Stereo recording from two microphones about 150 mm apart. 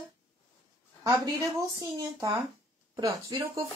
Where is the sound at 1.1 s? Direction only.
20° right (ahead or behind).